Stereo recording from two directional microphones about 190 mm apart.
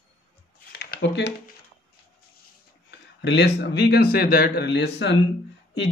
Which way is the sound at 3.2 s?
60° left (ahead or behind).